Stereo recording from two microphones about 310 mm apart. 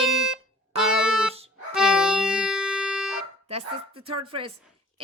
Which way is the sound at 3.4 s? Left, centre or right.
Centre.